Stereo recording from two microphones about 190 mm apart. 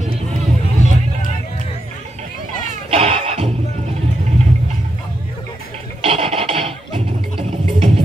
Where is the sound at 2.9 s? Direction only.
35° right (ahead or behind).